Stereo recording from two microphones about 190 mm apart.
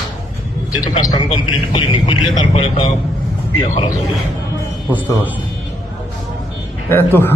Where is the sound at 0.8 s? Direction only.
20° left (ahead or behind).